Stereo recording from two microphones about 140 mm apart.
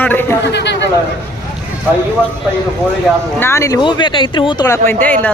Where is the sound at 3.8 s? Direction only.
35° left (ahead or behind).